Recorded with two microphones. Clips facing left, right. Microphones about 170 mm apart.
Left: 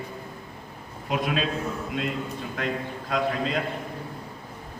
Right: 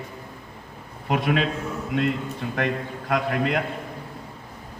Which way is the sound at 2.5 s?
65° right (ahead or behind).